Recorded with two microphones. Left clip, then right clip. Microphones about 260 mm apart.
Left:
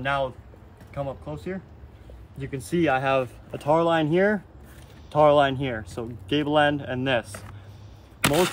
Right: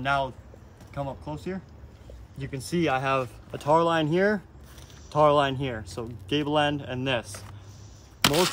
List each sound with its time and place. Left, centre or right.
0.0 s speech: centre
2.8 s speech: centre
8.2 s a sound: right